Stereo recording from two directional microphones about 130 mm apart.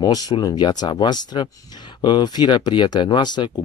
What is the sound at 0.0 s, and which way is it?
Speech, 30° left (ahead or behind).